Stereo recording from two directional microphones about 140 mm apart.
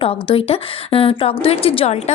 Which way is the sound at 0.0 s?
40° left (ahead or behind).